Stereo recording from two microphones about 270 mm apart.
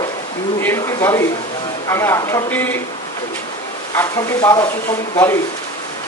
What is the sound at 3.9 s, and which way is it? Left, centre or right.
Speech, centre.